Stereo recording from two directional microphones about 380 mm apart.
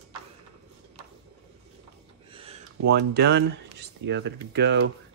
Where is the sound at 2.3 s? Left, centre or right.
Centre.